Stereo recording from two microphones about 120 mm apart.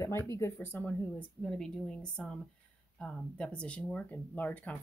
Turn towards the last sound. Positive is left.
turn(degrees=10)  # may be behind; listen again after turning